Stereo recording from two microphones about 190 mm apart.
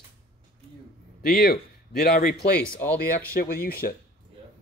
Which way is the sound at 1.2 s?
55° left (ahead or behind).